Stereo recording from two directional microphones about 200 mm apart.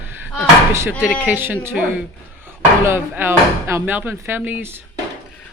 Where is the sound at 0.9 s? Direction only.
5° left (ahead or behind).